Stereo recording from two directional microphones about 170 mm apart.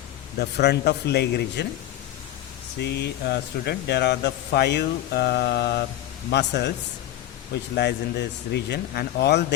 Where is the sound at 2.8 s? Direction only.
80° left.